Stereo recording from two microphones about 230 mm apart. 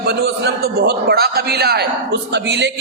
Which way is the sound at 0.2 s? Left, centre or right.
Right.